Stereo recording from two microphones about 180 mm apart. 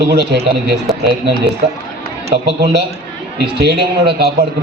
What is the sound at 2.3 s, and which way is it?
A man's voice, 70° right (ahead or behind).